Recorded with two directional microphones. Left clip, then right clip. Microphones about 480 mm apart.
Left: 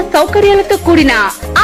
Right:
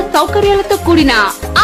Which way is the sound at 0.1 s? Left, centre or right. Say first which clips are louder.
Left 3 dB; centre.